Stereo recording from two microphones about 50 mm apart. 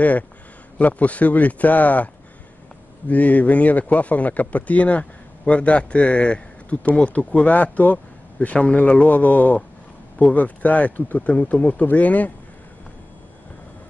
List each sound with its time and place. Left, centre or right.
0.7 s speech: left
3.1 s a man's voice: left